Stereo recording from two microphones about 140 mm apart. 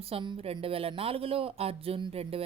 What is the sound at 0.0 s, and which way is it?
Speech, 40° right (ahead or behind).